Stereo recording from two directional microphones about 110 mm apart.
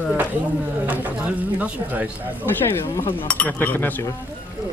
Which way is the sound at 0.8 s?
15° right (ahead or behind).